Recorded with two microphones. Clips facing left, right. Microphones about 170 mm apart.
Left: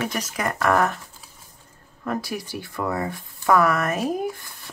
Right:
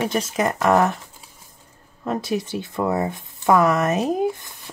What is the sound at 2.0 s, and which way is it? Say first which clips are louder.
Speech: right 4 dB; 20° right (ahead or behind).